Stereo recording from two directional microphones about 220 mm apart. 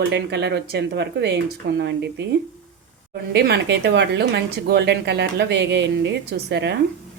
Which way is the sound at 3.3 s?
50° right (ahead or behind).